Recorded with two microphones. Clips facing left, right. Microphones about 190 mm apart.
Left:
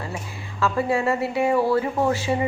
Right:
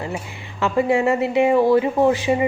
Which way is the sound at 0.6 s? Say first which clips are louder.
Right 4 dB; 20° right (ahead or behind).